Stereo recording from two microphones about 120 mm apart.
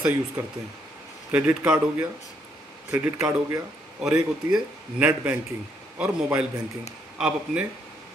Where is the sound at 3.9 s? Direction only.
5° right (ahead or behind).